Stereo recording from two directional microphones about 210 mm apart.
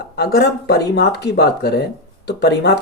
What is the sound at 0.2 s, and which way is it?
Speech, 50° left (ahead or behind).